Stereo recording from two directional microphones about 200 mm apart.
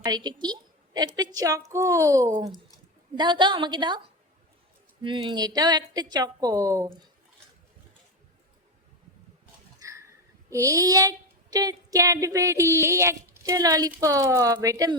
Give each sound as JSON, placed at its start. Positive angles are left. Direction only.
{"t": 0.0, "sound": "a woman's voice", "side_deg": -20}
{"t": 5.0, "sound": "a woman's voice", "side_deg": -25}
{"t": 9.7, "sound": "a sound", "side_deg": -15}
{"t": 11.5, "sound": "speech", "side_deg": -20}